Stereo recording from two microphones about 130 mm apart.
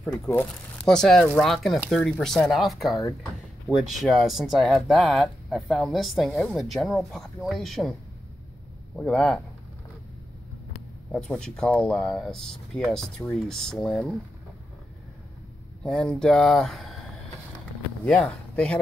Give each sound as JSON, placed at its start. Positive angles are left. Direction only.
{"t": 0.0, "sound": "speech", "side_deg": 15}
{"t": 0.8, "sound": "speech", "side_deg": 5}
{"t": 8.9, "sound": "speech", "side_deg": 5}
{"t": 11.1, "sound": "speech", "side_deg": 5}
{"t": 15.8, "sound": "speech", "side_deg": 5}
{"t": 18.0, "sound": "speech", "side_deg": 5}